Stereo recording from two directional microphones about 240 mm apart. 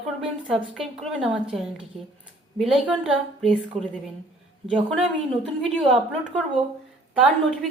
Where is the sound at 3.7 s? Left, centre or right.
Right.